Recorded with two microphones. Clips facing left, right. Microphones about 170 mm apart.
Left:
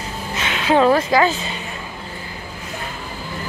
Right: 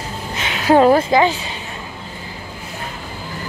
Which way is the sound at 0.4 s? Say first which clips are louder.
Right 3 dB; 35° right (ahead or behind).